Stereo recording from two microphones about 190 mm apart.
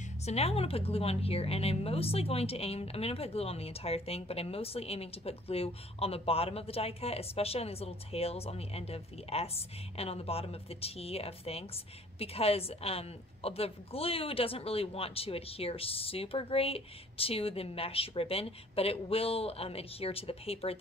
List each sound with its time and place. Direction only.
0.2 s speech: 35° left (ahead or behind)